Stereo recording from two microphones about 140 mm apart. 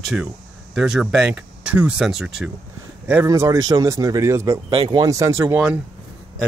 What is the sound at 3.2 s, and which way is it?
Speech, 25° right (ahead or behind).